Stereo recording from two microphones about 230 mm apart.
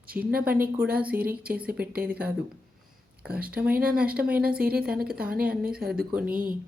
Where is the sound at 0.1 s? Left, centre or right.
Right.